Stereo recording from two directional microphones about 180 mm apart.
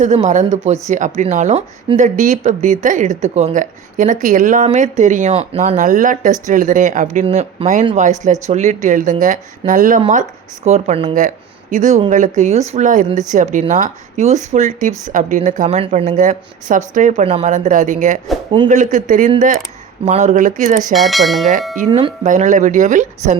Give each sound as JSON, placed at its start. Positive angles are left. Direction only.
{"t": 0.0, "sound": "speech", "side_deg": -40}
{"t": 20.9, "sound": "speech", "side_deg": 0}
{"t": 21.8, "sound": "speech", "side_deg": -30}
{"t": 22.2, "sound": "speech", "side_deg": -45}